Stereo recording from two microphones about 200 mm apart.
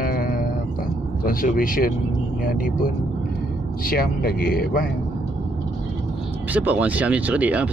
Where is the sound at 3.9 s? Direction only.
45° left (ahead or behind).